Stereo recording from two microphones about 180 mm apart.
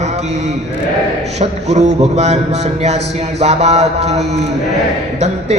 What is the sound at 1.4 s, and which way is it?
A man's voice, 40° right (ahead or behind).